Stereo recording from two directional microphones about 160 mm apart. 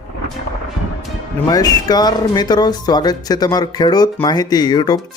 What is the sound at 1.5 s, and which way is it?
Speech, 25° left (ahead or behind).